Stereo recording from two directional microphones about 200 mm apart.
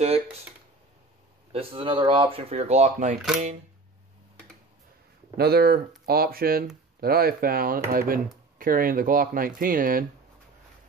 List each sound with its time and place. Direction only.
1.5 s speech: 25° right (ahead or behind)
5.4 s speech: 50° right (ahead or behind)